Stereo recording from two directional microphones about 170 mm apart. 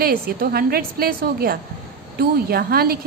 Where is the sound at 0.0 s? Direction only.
60° right (ahead or behind).